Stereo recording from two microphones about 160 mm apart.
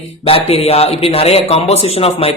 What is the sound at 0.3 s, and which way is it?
Speech, 40° left (ahead or behind).